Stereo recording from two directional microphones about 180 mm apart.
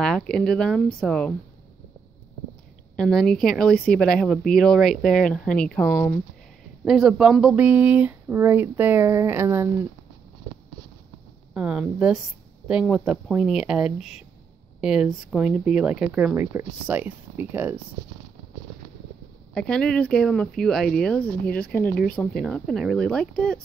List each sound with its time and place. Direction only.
0.0 s speech: 5° left (ahead or behind)
3.0 s speech: 5° left (ahead or behind)
6.8 s speech: 5° right (ahead or behind)
11.5 s speech: 5° right (ahead or behind)
19.5 s speech: 5° left (ahead or behind)
21.5 s speech: 60° left (ahead or behind)
22.1 s speech: 5° left (ahead or behind)